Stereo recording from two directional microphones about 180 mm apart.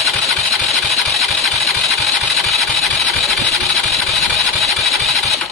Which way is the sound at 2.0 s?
Centre (ahead or behind).